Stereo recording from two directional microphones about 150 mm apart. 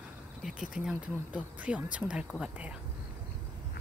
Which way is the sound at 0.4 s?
5° right (ahead or behind).